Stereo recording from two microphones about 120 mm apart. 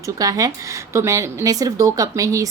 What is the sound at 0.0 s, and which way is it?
A woman's voice, 30° right (ahead or behind).